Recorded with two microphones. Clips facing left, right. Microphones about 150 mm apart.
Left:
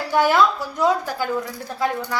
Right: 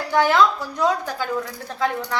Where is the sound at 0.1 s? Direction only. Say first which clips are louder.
Even; 10° left (ahead or behind).